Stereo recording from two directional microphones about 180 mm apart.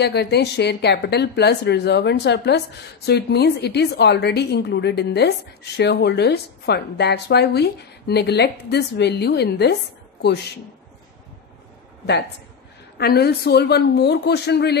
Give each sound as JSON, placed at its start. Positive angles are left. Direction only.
{"t": 0.0, "sound": "a woman's voice", "side_deg": 65}
{"t": 12.9, "sound": "a woman's voice", "side_deg": 60}